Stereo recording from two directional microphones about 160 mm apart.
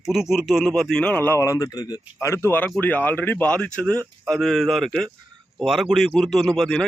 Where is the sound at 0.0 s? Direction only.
Centre (ahead or behind).